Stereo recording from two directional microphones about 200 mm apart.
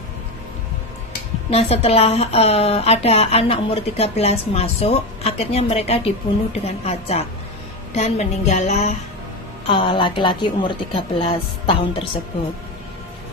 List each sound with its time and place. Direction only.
1.5 s a woman's voice: 30° left (ahead or behind)